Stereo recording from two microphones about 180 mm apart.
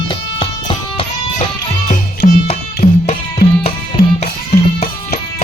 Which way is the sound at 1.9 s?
45° left (ahead or behind).